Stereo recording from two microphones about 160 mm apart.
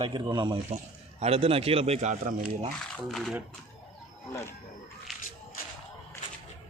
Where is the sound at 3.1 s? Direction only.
Centre (ahead or behind).